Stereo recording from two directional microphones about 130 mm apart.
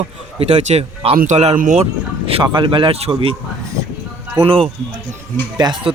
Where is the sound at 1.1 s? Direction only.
65° right (ahead or behind).